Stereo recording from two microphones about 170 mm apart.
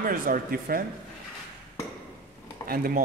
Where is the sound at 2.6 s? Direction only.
60° right (ahead or behind).